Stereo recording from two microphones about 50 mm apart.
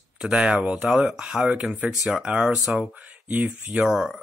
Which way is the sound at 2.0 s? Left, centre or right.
Centre.